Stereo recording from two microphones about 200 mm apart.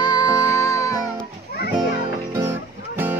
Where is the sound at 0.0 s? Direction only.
20° left (ahead or behind).